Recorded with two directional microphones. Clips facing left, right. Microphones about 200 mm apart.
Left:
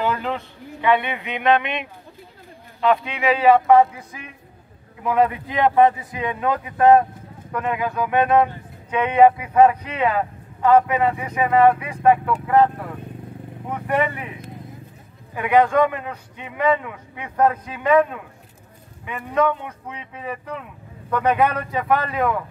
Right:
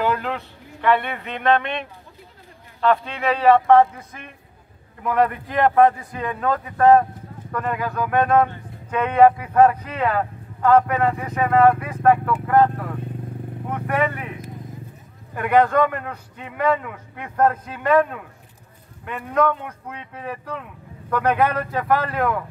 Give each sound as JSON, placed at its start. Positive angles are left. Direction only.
{"t": 0.0, "sound": "a man's voice", "side_deg": 0}
{"t": 2.8, "sound": "a man's voice", "side_deg": 10}
{"t": 21.5, "sound": "a man's voice", "side_deg": 0}